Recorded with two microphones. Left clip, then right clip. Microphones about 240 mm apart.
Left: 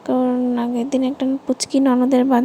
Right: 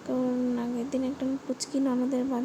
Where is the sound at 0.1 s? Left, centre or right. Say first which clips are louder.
Left 10 dB; left.